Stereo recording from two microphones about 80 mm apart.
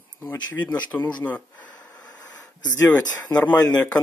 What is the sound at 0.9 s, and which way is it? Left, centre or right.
Speech, left.